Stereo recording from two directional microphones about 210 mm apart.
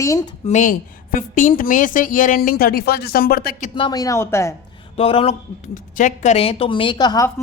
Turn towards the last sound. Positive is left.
turn(degrees=15)  # may be behind; listen again after turning